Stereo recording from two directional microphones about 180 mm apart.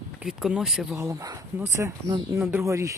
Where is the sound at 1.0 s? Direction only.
15° right (ahead or behind).